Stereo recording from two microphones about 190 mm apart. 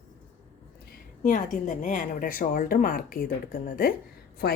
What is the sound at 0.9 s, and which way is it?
A woman's voice, 45° left (ahead or behind).